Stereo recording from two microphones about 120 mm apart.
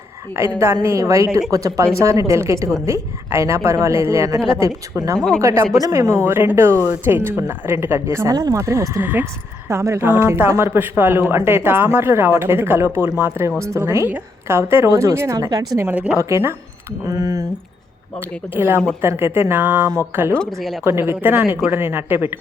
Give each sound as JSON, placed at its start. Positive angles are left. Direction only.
{"t": 0.3, "sound": "speech", "side_deg": -20}
{"t": 15.4, "sound": "speech", "side_deg": -35}
{"t": 15.9, "sound": "a woman's voice", "side_deg": -10}
{"t": 18.5, "sound": "speech", "side_deg": -20}
{"t": 20.3, "sound": "speech", "side_deg": 5}
{"t": 20.8, "sound": "speech", "side_deg": -20}